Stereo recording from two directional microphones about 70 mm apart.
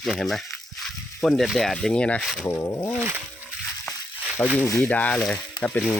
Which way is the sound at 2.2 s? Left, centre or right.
Centre.